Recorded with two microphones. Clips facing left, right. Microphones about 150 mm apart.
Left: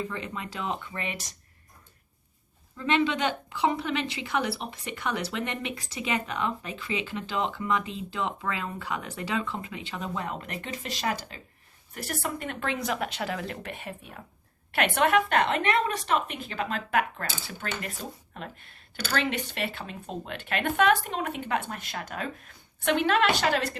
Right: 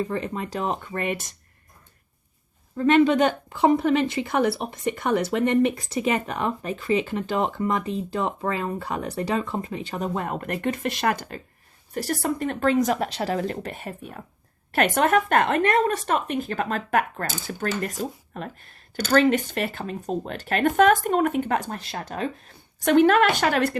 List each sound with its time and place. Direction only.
0.0 s a woman's voice: 40° right (ahead or behind)
2.7 s a woman's voice: 45° right (ahead or behind)
11.9 s a woman's voice: 35° right (ahead or behind); by 23.7 s 50° right (ahead or behind)